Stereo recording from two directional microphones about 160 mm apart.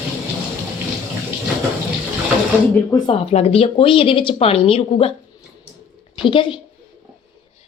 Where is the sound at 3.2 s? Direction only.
40° left (ahead or behind).